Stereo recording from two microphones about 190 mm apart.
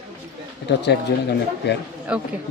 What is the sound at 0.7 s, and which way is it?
Speech, 65° left (ahead or behind).